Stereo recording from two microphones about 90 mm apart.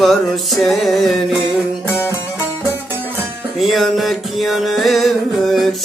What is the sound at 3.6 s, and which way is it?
Music, centre (ahead or behind).